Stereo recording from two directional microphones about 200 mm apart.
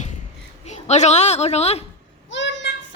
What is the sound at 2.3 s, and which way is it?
Child singing, 65° left (ahead or behind).